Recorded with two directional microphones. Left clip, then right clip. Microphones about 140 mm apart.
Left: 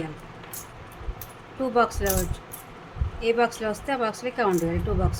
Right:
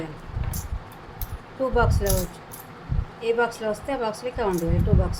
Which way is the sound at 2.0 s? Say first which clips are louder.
Even; 25° left (ahead or behind).